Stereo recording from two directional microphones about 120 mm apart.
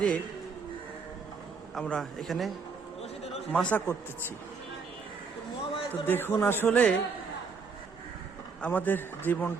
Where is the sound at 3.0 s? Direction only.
60° left (ahead or behind).